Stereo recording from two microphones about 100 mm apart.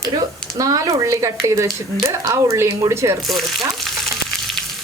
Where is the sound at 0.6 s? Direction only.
35° right (ahead or behind).